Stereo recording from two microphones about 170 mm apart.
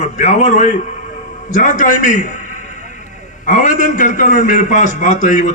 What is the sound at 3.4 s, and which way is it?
A man's voice, 45° left (ahead or behind).